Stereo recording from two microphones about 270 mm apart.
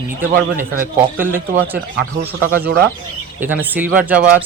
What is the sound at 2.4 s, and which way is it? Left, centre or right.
Speech, right.